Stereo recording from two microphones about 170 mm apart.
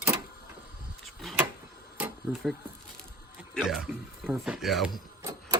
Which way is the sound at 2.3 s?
Centre (ahead or behind).